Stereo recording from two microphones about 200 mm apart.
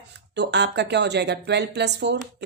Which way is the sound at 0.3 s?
60° right (ahead or behind).